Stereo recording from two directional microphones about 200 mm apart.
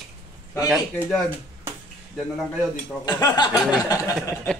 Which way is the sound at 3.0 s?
20° left (ahead or behind).